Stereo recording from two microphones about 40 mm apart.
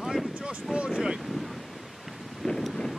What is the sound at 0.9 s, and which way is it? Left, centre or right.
Wind noise, right.